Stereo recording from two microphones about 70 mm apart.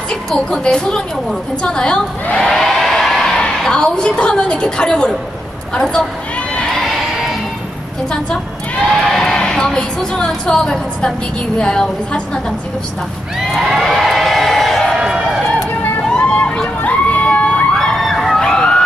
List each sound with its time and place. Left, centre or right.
0.3 s a woman's voice: centre
8.8 s a woman's voice: centre
13.6 s a sound: centre
15.0 s run: centre
16.1 s crowd: centre
17.7 s a sound: centre